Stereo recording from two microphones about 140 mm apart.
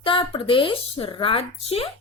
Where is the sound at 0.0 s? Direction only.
40° left (ahead or behind).